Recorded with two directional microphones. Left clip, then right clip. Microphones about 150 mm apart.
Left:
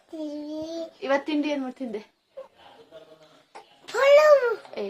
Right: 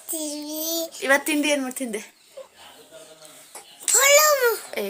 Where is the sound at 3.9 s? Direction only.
15° left (ahead or behind).